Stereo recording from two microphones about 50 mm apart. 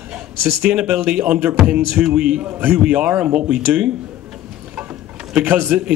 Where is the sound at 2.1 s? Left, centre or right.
Centre.